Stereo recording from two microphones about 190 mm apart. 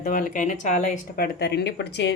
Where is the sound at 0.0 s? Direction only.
45° left (ahead or behind).